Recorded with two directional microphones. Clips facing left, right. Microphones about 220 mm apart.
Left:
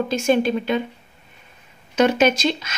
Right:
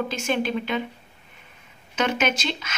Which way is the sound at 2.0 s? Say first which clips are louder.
Left 7 dB; 35° left (ahead or behind).